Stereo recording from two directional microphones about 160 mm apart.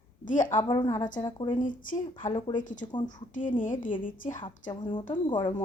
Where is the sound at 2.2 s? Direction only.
35° left (ahead or behind); by 4.4 s 55° left (ahead or behind).